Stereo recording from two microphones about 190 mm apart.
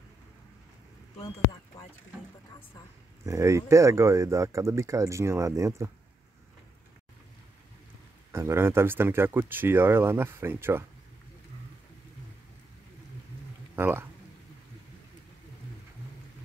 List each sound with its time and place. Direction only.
1.1 s speech: 30° left (ahead or behind)
3.3 s speech: 15° right (ahead or behind)
8.3 s speech: 15° right (ahead or behind)
13.7 s speech: 10° right (ahead or behind)